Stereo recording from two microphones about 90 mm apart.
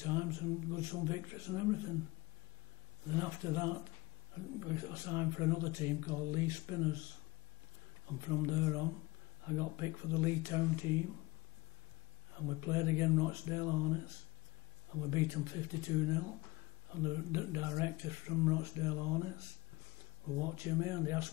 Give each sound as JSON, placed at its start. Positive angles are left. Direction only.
{"t": 0.0, "sound": "speech", "side_deg": -30}
{"t": 3.1, "sound": "speech", "side_deg": -30}
{"t": 8.1, "sound": "speech", "side_deg": -30}
{"t": 12.4, "sound": "speech", "side_deg": -30}